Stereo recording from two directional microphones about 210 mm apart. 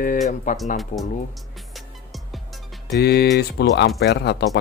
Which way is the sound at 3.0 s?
55° left (ahead or behind).